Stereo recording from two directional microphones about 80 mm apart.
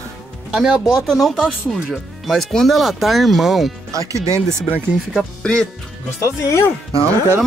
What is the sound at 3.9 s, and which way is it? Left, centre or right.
Speech, right.